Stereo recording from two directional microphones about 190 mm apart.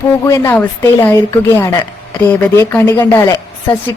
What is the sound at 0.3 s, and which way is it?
A woman's voice, 15° left (ahead or behind).